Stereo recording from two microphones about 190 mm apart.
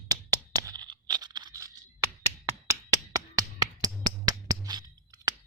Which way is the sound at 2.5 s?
15° right (ahead or behind).